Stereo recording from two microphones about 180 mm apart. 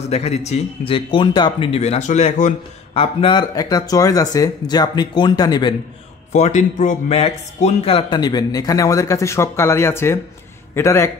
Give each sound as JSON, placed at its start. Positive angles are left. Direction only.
{"t": 0.1, "sound": "speech", "side_deg": 35}
{"t": 6.3, "sound": "speech", "side_deg": 40}